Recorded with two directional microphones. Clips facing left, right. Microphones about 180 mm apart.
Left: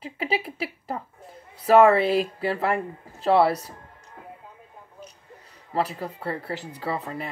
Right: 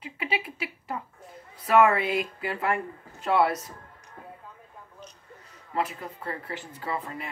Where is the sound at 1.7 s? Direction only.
35° left (ahead or behind).